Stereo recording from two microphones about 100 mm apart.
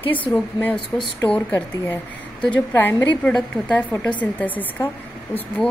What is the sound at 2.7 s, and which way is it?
A woman's voice, 20° left (ahead or behind).